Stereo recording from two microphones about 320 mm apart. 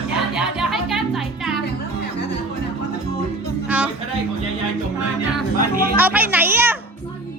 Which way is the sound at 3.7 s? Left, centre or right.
Centre.